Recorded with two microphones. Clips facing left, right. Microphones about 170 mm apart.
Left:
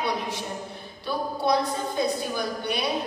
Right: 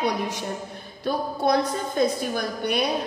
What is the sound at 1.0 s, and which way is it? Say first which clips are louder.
A woman's voice: right 3 dB; 50° right (ahead or behind).